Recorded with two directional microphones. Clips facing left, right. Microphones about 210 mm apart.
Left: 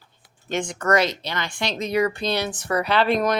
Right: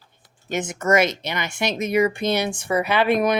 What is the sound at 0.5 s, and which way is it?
Speech, 5° right (ahead or behind).